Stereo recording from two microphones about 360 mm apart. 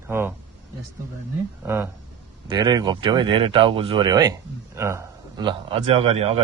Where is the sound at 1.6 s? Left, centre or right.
Centre.